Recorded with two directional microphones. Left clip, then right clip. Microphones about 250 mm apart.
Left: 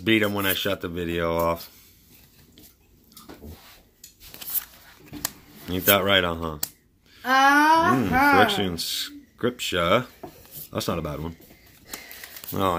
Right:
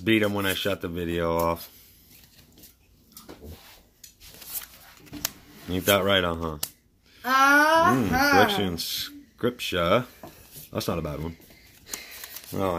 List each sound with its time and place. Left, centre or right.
0.0 s speech: centre
5.7 s speech: centre
7.2 s babbling: right
8.4 s speech: centre
12.4 s speech: centre